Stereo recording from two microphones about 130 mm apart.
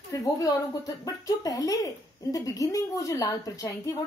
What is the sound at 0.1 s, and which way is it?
A woman's voice, 30° left (ahead or behind).